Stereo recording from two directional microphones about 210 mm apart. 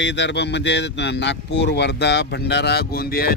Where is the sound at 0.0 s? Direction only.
55° left (ahead or behind).